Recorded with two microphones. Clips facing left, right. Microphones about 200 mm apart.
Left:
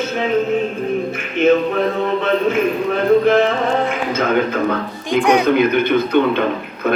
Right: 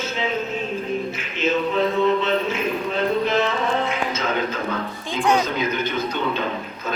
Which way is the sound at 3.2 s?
55° left (ahead or behind).